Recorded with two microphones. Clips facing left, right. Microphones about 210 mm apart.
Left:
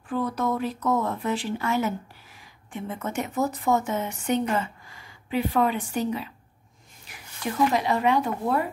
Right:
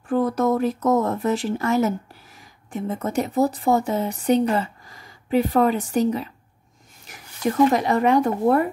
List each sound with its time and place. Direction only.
0.1 s speech: 45° right (ahead or behind)